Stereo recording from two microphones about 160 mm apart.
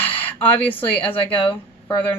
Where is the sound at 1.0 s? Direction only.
35° left (ahead or behind).